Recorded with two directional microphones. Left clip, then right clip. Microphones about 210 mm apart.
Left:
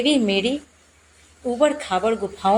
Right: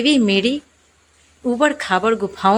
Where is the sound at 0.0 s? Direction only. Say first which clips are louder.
Right 3 dB; 45° right (ahead or behind).